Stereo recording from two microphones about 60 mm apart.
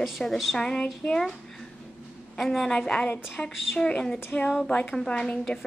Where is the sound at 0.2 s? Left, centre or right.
Centre.